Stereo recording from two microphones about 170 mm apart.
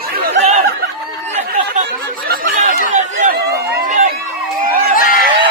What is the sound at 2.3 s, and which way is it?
Chatter, 60° right (ahead or behind).